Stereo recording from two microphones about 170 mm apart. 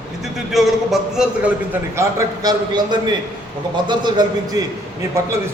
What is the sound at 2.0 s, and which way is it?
Speech, 20° right (ahead or behind).